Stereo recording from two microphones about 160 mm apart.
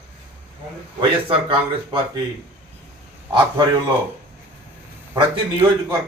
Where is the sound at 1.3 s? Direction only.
35° right (ahead or behind).